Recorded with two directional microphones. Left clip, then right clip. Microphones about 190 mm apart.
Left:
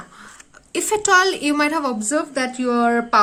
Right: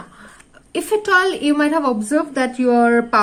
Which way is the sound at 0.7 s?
20° left (ahead or behind).